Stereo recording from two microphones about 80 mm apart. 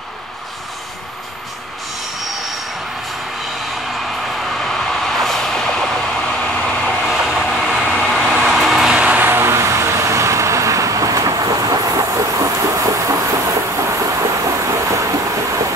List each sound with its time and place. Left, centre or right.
4.2 s vehicle: centre
6.9 s vehicle: centre; by 15.6 s right